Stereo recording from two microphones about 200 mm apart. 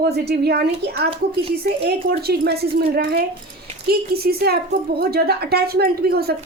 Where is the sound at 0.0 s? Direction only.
55° right (ahead or behind).